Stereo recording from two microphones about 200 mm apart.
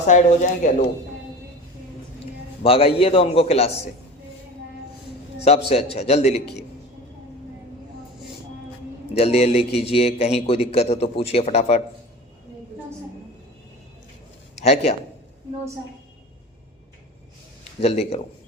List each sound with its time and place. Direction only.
0.0 s a man's voice: 35° left (ahead or behind)
2.6 s a man's voice: 30° left (ahead or behind)
5.6 s a man's voice: 30° left (ahead or behind)
9.1 s a man's voice: 30° left (ahead or behind)
14.6 s a man's voice: 30° left (ahead or behind)
17.7 s a man's voice: 30° left (ahead or behind)